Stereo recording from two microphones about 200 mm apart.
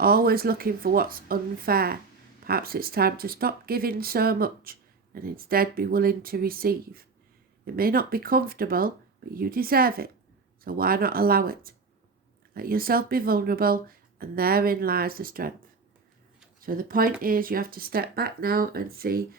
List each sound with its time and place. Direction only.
0.0 s speech: 50° right (ahead or behind)
16.6 s speech: 45° right (ahead or behind)